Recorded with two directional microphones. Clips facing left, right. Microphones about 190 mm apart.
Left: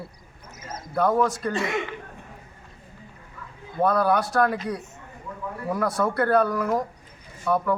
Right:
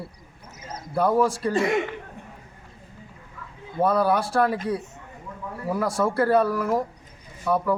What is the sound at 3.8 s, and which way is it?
Speech, 5° right (ahead or behind).